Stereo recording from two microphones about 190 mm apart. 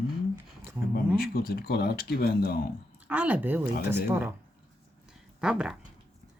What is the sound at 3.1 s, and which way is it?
Speech, 5° right (ahead or behind).